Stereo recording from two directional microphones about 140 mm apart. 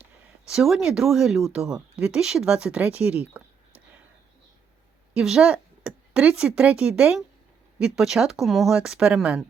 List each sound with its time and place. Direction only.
0.0 s speech: 5° right (ahead or behind)
5.1 s speech: 5° right (ahead or behind)